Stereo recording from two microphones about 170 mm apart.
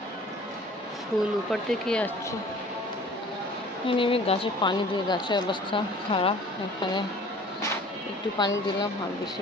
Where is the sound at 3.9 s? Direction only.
30° left (ahead or behind).